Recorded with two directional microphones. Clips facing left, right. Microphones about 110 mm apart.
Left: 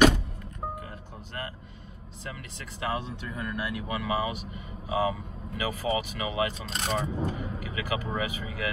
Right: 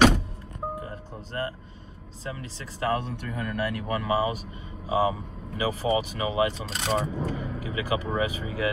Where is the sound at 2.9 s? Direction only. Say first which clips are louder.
Right 3 dB; 60° right (ahead or behind).